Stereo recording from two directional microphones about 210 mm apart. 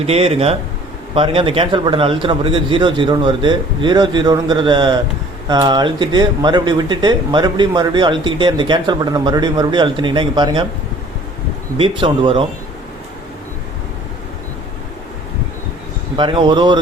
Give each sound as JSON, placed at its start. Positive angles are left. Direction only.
{"t": 0.0, "sound": "speech", "side_deg": -30}
{"t": 11.8, "sound": "speech", "side_deg": -25}
{"t": 16.1, "sound": "speech", "side_deg": -25}